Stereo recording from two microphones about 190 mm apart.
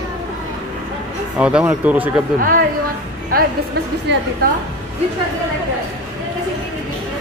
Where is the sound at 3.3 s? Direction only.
50° right (ahead or behind).